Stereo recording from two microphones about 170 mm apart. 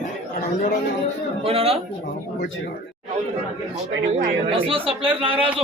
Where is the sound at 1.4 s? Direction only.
35° right (ahead or behind).